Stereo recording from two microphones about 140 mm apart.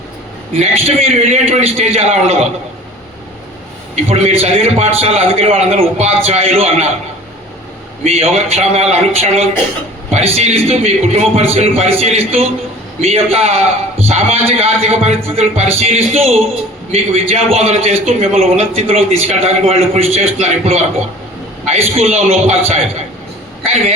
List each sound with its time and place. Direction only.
0.6 s a man's voice: 45° right (ahead or behind)
3.9 s a man's voice: 45° right (ahead or behind)
8.0 s a man's voice: 45° right (ahead or behind)